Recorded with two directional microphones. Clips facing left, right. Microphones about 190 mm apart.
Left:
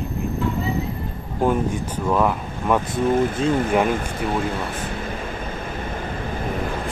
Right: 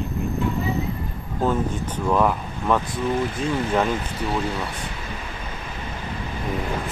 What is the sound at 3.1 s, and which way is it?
Speech, 50° left (ahead or behind).